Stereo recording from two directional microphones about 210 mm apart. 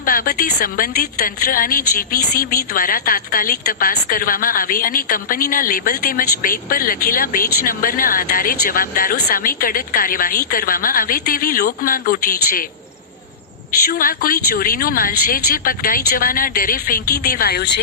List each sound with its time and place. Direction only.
0.0 s a woman's voice: 45° left (ahead or behind)
13.8 s a woman's voice: 45° left (ahead or behind)